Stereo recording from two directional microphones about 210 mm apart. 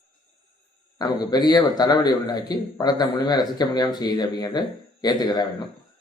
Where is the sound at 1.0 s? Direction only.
20° left (ahead or behind).